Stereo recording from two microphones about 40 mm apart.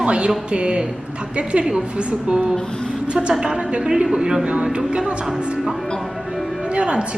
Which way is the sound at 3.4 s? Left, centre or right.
Right.